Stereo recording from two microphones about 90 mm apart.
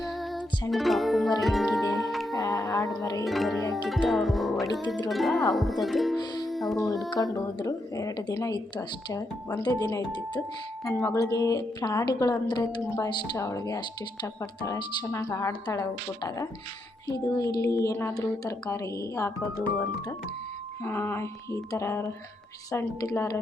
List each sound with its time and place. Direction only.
0.0 s music: centre (ahead or behind)
2.0 s a sound: centre (ahead or behind)
2.4 s whale vocalization: 40° left (ahead or behind)
3.0 s speech: 40° left (ahead or behind)
3.2 s speech: centre (ahead or behind)
3.7 s music: centre (ahead or behind)
4.1 s speech: centre (ahead or behind)
6.4 s music: centre (ahead or behind)
7.3 s speech: 40° left (ahead or behind)
10.8 s speech: 35° left (ahead or behind); by 13.1 s 50° left (ahead or behind)
13.3 s speech: 35° left (ahead or behind)
13.7 s speech: 50° left (ahead or behind)
18.7 s speech: 35° left (ahead or behind)
20.8 s speech: 25° left (ahead or behind)